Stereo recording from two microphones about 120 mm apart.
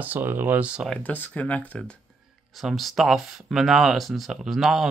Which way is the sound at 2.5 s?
Centre (ahead or behind).